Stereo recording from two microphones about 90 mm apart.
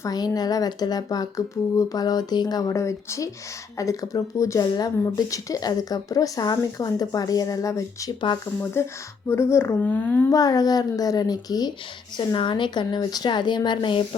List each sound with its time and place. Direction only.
0.0 s speech: 45° left (ahead or behind); by 9.7 s 30° left (ahead or behind)
9.8 s speech: 15° left (ahead or behind)
10.2 s speech: 45° left (ahead or behind)
12.1 s speech: 55° left (ahead or behind)